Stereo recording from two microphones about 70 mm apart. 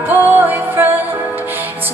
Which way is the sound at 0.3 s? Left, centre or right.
Right.